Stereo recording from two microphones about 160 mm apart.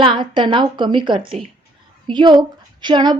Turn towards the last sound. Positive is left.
turn(degrees=-30)  # may be behind; listen again after turning